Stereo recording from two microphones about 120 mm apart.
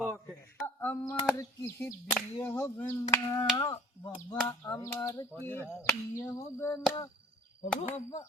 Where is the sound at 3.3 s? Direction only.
40° left (ahead or behind).